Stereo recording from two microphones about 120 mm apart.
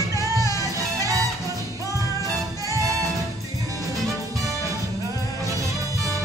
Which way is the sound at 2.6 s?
30° right (ahead or behind).